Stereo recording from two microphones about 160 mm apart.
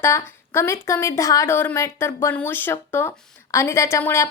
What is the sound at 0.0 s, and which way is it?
A woman's voice, 15° left (ahead or behind).